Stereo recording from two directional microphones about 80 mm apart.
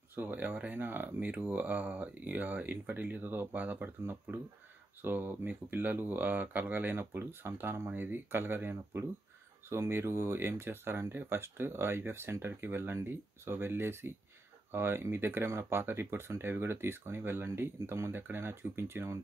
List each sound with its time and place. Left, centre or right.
0.1 s speech: right